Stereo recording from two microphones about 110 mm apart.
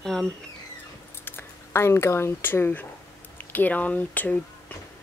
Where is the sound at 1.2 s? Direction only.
20° left (ahead or behind).